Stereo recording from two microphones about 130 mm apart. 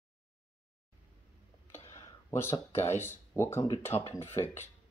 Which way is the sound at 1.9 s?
20° left (ahead or behind).